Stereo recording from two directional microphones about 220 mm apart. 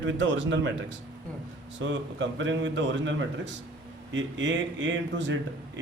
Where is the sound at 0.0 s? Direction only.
55° right (ahead or behind).